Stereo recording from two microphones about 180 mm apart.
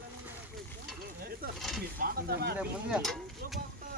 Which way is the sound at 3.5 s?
55° right (ahead or behind).